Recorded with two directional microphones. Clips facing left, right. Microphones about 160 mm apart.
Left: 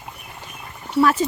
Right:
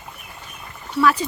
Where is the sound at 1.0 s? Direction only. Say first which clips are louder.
Left 1 dB; 45° left (ahead or behind).